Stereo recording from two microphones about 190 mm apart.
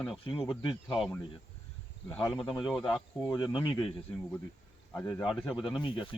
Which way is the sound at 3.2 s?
25° left (ahead or behind).